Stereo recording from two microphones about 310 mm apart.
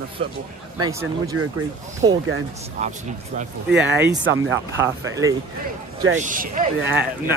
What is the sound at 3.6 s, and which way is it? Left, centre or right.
Speech, right.